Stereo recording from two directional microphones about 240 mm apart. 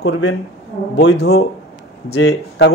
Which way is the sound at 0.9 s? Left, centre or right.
Left.